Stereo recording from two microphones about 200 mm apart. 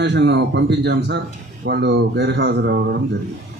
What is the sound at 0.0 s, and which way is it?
A man's voice, 60° right (ahead or behind).